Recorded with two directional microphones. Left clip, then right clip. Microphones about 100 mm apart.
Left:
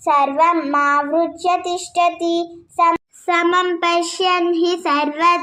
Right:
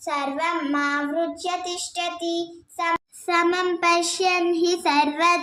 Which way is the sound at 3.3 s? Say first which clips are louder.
Left 5 dB; 15° left (ahead or behind).